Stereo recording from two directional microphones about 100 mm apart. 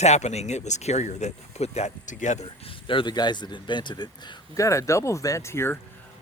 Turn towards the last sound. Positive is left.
turn(degrees=25)  # may be behind; listen again after turning